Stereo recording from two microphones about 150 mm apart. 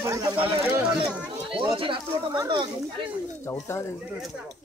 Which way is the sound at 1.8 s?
35° right (ahead or behind).